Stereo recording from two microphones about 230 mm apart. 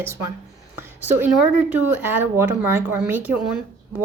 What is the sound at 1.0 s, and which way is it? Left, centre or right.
A woman's voice, centre.